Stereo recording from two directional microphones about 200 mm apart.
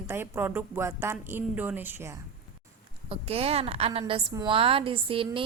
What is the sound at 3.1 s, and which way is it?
A woman's voice, 30° right (ahead or behind).